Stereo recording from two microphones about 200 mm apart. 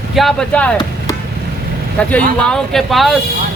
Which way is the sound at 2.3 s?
5° left (ahead or behind).